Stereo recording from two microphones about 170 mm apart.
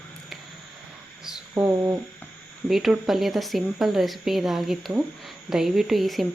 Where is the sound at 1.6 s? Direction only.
10° right (ahead or behind).